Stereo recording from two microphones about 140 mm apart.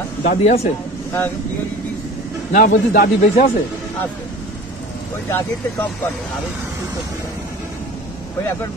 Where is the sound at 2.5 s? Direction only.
85° left.